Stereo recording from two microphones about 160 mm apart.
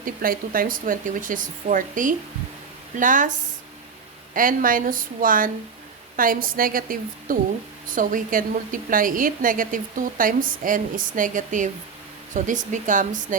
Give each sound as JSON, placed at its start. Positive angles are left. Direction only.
{"t": 0.0, "sound": "a woman's voice", "side_deg": -60}
{"t": 4.4, "sound": "a woman's voice", "side_deg": -60}